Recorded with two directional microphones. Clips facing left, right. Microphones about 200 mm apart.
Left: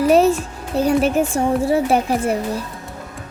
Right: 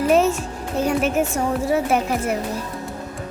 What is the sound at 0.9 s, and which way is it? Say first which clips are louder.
A child's voice: left 4 dB; 35° left (ahead or behind).